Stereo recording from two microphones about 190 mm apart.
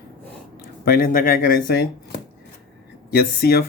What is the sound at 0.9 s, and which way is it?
Speech, 50° left (ahead or behind).